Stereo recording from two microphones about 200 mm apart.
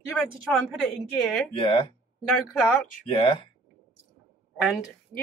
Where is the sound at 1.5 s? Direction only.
25° left (ahead or behind).